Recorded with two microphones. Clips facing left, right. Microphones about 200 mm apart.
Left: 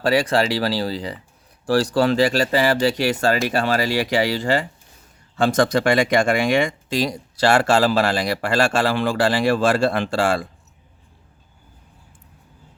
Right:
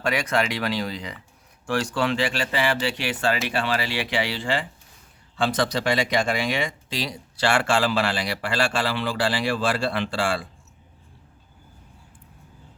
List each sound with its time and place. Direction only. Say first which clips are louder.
0.0 s speech: left 6 dB; 35° left (ahead or behind)